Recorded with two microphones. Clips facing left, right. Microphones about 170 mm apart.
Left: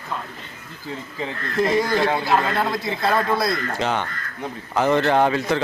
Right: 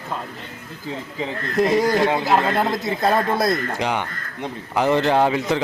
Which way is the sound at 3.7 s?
15° right (ahead or behind).